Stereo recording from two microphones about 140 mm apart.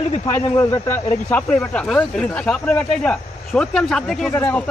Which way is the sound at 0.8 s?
15° left (ahead or behind).